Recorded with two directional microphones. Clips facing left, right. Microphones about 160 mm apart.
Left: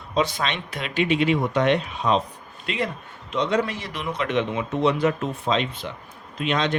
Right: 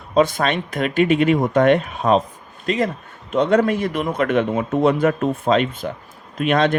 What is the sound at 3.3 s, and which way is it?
Speech, 50° right (ahead or behind).